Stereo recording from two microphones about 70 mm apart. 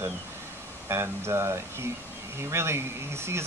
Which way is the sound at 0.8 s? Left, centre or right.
Right.